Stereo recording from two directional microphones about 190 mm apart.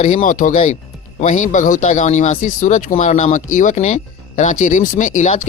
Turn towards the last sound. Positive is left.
turn(degrees=40)  # may be behind; listen again after turning